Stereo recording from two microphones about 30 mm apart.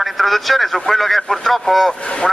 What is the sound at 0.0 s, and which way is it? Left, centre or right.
Speech, centre.